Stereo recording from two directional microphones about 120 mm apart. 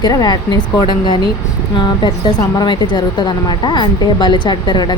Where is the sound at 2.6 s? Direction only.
40° left (ahead or behind).